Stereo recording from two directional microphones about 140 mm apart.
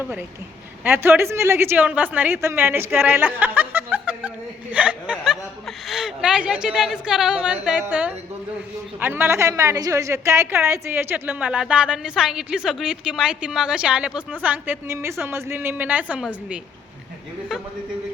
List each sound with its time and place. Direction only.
0.0 s a woman's voice: 15° right (ahead or behind)
3.9 s chuckle: 10° right (ahead or behind)
4.7 s a woman's voice: 10° right (ahead or behind)